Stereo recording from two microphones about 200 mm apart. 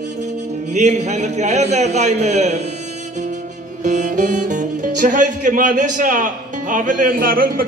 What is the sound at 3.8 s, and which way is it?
Speech, 40° right (ahead or behind).